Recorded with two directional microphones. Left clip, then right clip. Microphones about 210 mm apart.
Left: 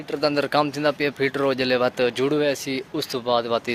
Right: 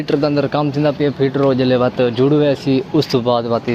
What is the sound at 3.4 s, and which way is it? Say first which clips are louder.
Speech: right 5 dB; 35° left (ahead or behind).